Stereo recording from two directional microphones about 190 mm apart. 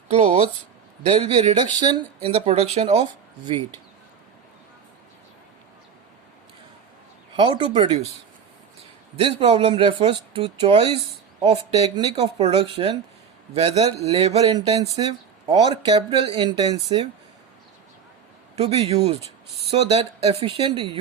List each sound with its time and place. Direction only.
0.1 s speech: 35° right (ahead or behind)
1.3 s speech: 25° right (ahead or behind)
7.3 s speech: 25° right (ahead or behind)
9.1 s a man's voice: 30° right (ahead or behind)
18.5 s a man's voice: 30° right (ahead or behind)